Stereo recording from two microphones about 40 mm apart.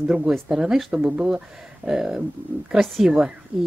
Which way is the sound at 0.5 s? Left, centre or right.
Centre.